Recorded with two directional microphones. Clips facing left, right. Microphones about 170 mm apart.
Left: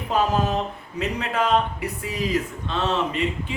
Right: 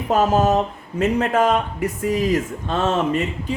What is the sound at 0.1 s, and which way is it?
Speech, 45° right (ahead or behind).